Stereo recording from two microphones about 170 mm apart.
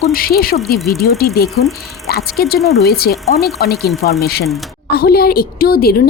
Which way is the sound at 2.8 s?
65° left (ahead or behind).